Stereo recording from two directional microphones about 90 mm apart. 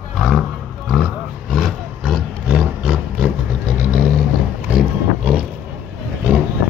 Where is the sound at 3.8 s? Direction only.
15° right (ahead or behind).